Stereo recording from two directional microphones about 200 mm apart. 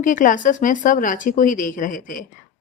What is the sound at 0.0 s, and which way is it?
Speech, 40° left (ahead or behind).